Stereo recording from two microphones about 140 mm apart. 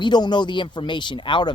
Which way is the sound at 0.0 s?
30° left (ahead or behind).